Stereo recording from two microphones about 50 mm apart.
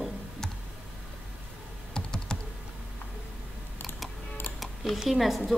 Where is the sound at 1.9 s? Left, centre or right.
Centre.